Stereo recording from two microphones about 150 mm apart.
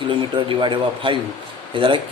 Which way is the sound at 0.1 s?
35° right (ahead or behind).